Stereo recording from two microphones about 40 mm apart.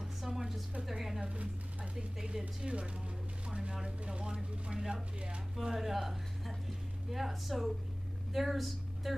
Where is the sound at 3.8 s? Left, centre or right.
Right.